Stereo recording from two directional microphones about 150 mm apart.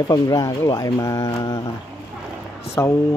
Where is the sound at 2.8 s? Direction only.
20° left (ahead or behind).